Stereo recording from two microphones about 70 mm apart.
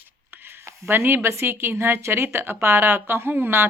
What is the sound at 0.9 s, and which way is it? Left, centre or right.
Speech, right.